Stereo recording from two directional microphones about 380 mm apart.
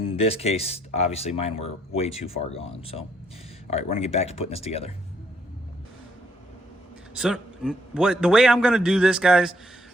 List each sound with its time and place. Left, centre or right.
0.2 s speech: centre
7.2 s a man's voice: centre